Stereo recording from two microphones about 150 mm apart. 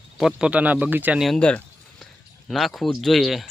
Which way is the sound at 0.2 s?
5° right (ahead or behind).